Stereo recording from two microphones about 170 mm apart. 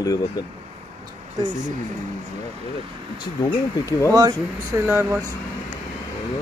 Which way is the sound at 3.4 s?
20° left (ahead or behind).